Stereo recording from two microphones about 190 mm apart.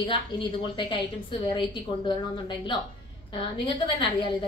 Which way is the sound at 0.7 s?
25° left (ahead or behind).